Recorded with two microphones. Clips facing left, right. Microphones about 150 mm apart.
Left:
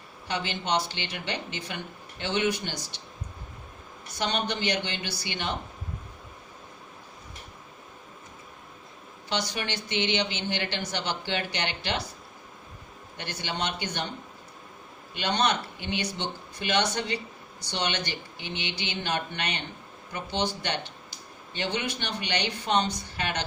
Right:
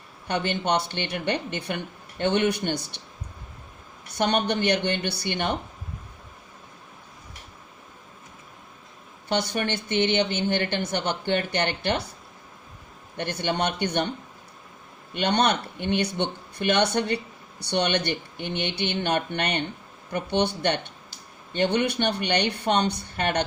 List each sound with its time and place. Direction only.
0.3 s speech: 55° right (ahead or behind)
4.1 s speech: 55° right (ahead or behind)
9.3 s speech: 55° right (ahead or behind)
13.1 s speech: 55° right (ahead or behind)
15.1 s speech: 60° right (ahead or behind)